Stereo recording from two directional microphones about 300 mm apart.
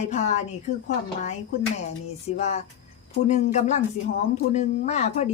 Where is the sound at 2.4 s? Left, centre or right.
Left.